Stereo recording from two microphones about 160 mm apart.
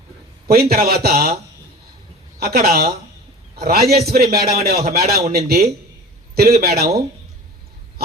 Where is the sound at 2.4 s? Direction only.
75° right (ahead or behind).